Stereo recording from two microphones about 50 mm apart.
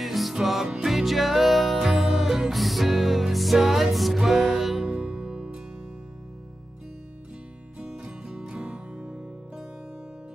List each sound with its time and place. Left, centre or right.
0.0 s music: centre
5.3 s music: centre
7.8 s music: centre